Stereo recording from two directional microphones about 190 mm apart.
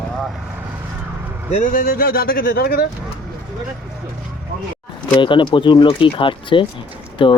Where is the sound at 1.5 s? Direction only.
45° left (ahead or behind).